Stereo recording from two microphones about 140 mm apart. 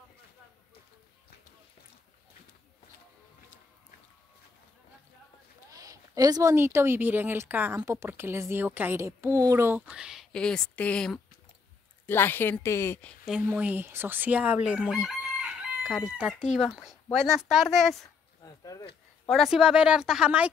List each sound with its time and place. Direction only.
5.7 s a sound: 25° right (ahead or behind)
6.5 s speech: 15° right (ahead or behind)
10.3 s a woman's voice: 5° left (ahead or behind)
13.2 s speech: 5° right (ahead or behind)
13.5 s crowing: 15° right (ahead or behind)
18.4 s a sound: 25° left (ahead or behind)
19.2 s crowing: centre (ahead or behind)